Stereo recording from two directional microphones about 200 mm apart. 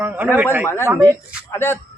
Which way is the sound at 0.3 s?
10° right (ahead or behind).